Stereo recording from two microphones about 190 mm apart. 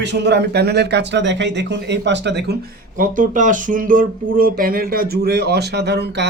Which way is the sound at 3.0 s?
40° right (ahead or behind).